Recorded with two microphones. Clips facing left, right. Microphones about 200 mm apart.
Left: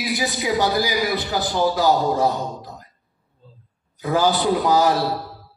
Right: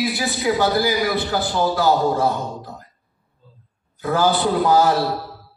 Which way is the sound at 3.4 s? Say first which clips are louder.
Left 3 dB; 30° left (ahead or behind).